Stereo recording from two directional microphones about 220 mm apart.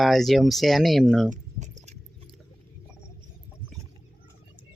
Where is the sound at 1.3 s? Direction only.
30° right (ahead or behind).